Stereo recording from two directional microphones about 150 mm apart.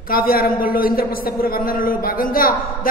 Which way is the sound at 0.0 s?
80° left.